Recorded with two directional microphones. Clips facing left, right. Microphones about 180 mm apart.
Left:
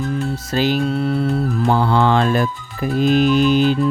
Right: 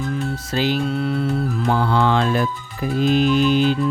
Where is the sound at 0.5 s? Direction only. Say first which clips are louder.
Left 3 dB; 45° left (ahead or behind).